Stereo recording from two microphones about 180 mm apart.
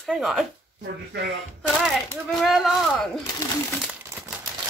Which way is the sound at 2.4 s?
Centre (ahead or behind).